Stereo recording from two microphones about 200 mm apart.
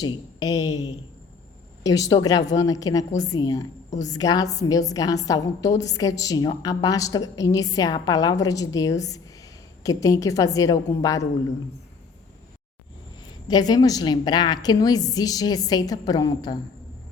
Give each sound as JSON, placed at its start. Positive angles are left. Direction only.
{"t": 0.0, "sound": "a woman's voice", "side_deg": 20}
{"t": 13.5, "sound": "a woman's voice", "side_deg": 20}